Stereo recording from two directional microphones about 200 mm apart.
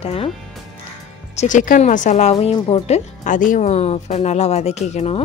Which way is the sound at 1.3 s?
40° left (ahead or behind).